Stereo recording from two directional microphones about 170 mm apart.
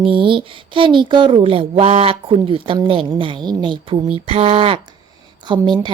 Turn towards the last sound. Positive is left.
turn(degrees=-25)  # may be behind; listen again after turning